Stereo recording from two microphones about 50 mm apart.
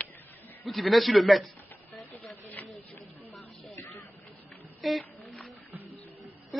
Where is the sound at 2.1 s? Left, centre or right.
Left.